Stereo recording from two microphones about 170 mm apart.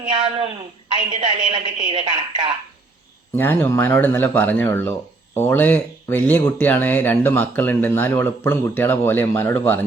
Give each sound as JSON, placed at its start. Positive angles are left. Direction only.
{"t": 0.1, "sound": "a woman's voice", "side_deg": -35}
{"t": 3.3, "sound": "speech", "side_deg": 10}